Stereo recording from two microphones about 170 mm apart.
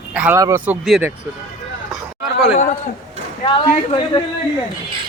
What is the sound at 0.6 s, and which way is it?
Speech, 5° right (ahead or behind).